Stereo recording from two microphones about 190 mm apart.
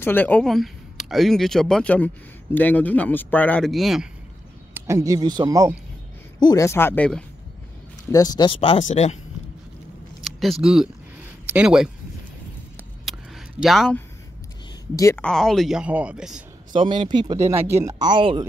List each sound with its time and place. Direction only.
0.0 s speech: 10° left (ahead or behind)
4.7 s speech: 15° right (ahead or behind)
6.4 s speech: 15° left (ahead or behind)
8.1 s speech: 20° left (ahead or behind); by 9.1 s 35° left (ahead or behind)
10.2 s speech: centre (ahead or behind)
13.6 s a woman's voice: centre (ahead or behind)
15.0 s speech: 15° left (ahead or behind)
15.2 s a woman's voice: centre (ahead or behind)
16.7 s speech: 25° right (ahead or behind)